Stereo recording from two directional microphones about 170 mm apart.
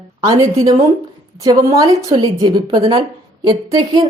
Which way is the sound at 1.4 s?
20° right (ahead or behind).